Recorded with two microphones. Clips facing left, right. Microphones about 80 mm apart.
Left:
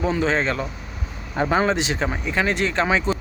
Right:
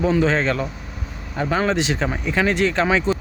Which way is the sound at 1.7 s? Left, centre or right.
Centre.